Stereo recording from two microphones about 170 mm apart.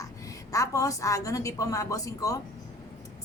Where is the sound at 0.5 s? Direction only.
20° left (ahead or behind).